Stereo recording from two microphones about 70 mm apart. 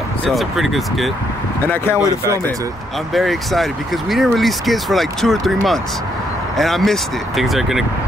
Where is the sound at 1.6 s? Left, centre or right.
Left.